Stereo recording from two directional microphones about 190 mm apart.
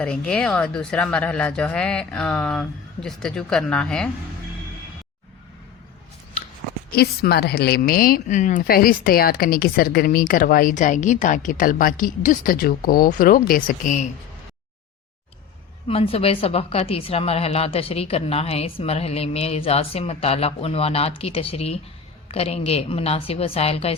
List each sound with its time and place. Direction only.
0.0 s speech: 5° left (ahead or behind)
6.9 s a woman's voice: 55° left (ahead or behind)
15.9 s a woman's voice: 30° left (ahead or behind)